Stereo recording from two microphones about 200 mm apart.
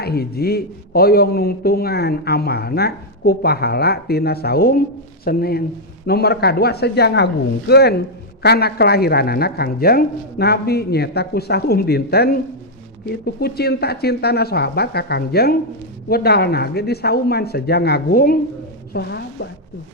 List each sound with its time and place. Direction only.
0.0 s a man's voice: 50° left (ahead or behind)